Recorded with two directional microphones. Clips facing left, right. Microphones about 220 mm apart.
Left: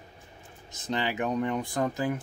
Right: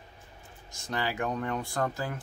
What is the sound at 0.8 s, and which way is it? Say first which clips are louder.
Speech: left 2 dB; 20° left (ahead or behind).